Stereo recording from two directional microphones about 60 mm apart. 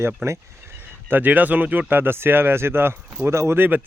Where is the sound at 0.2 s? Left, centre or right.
Right.